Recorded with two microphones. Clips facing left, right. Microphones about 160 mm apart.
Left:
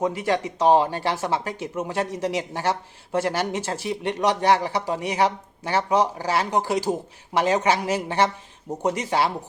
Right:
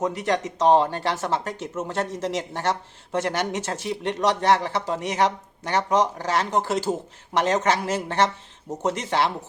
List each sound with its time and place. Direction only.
0.0 s speech: 5° left (ahead or behind)